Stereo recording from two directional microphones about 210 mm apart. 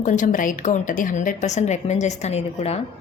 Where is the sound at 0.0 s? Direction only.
40° left (ahead or behind).